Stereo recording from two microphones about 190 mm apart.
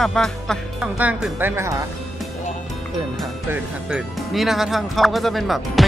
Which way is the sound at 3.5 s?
5° right (ahead or behind).